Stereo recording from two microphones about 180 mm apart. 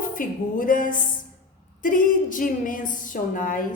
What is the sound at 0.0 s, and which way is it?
Speech, 50° left (ahead or behind).